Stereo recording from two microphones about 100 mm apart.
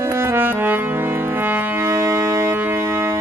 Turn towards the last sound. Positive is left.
turn(degrees=-25)  # may be behind; listen again after turning